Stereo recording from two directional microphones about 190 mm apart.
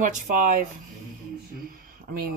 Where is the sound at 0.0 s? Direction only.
45° right (ahead or behind).